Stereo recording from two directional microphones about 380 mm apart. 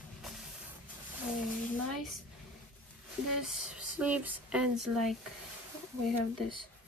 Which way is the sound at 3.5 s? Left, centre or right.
Centre.